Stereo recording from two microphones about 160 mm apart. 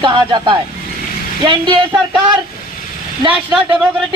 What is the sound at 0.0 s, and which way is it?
Speech, 30° right (ahead or behind).